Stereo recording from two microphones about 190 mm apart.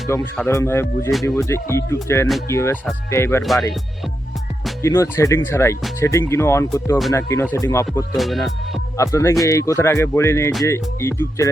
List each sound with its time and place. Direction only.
0.3 s speech: 15° left (ahead or behind)
3.4 s music: centre (ahead or behind)
4.8 s speech: 15° left (ahead or behind)
8.1 s music: centre (ahead or behind)
9.0 s speech: 15° left (ahead or behind)